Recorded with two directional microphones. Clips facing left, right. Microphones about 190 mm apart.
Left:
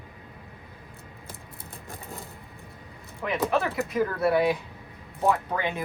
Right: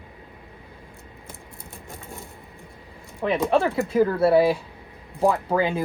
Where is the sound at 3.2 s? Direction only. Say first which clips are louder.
Right 5 dB; 30° right (ahead or behind).